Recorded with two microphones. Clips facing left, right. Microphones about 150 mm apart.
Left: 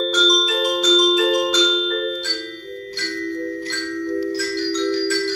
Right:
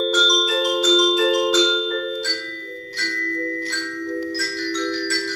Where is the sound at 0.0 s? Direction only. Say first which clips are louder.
Left 1 dB; 5° right (ahead or behind).